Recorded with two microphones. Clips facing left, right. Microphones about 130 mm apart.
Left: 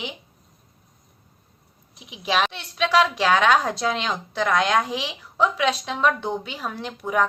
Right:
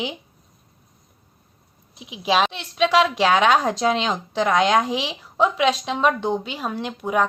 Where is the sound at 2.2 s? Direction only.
25° right (ahead or behind).